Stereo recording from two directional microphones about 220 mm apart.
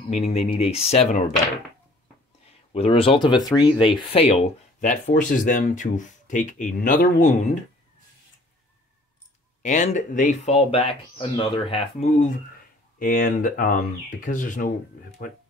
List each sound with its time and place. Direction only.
0.1 s speech: 30° left (ahead or behind)
2.7 s speech: 25° left (ahead or behind)
9.6 s speech: 30° left (ahead or behind)